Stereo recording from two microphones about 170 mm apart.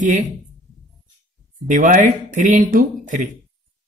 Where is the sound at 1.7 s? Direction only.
50° right (ahead or behind).